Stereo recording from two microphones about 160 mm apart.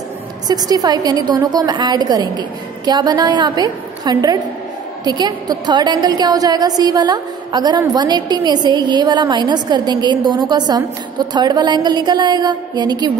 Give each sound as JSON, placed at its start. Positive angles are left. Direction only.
{"t": 0.5, "sound": "a woman's voice", "side_deg": -25}